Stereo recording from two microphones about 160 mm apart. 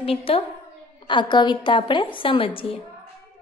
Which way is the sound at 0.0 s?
35° left (ahead or behind).